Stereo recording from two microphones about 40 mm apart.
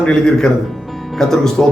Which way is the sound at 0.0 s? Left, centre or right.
Centre.